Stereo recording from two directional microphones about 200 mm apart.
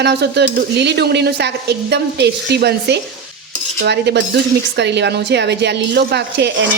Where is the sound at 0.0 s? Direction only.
55° right (ahead or behind).